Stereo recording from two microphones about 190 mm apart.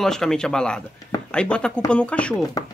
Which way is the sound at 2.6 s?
20° left (ahead or behind).